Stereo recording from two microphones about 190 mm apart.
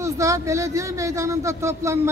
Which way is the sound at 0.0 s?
15° right (ahead or behind).